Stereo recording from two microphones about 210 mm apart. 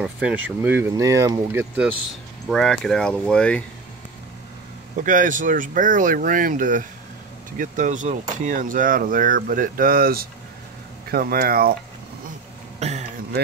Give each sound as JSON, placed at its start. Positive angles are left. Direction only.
{"t": 0.0, "sound": "speech", "side_deg": -5}
{"t": 2.5, "sound": "speech", "side_deg": 0}
{"t": 5.0, "sound": "speech", "side_deg": -40}
{"t": 12.7, "sound": "a sound", "side_deg": -30}